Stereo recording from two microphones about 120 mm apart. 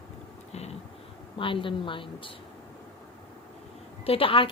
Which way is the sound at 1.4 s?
45° left (ahead or behind).